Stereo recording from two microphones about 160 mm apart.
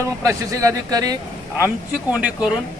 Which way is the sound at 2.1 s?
5° right (ahead or behind).